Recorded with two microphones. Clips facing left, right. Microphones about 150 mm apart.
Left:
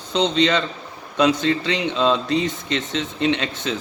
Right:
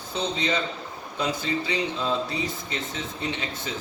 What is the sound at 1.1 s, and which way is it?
A man's voice, 80° left.